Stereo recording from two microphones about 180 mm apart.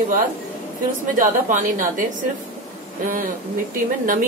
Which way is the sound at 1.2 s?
45° right (ahead or behind).